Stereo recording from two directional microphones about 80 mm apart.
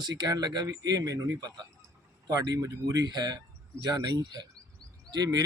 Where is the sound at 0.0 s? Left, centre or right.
Right.